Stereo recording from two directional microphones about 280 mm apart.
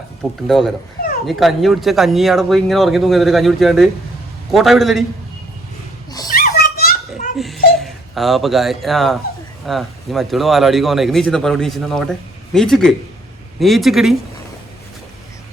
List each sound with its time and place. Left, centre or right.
0.2 s speech: centre
6.2 s a sound: left
7.3 s speech: centre